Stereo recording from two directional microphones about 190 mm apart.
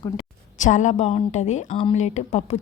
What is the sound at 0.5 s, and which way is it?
A woman's voice, 40° left (ahead or behind).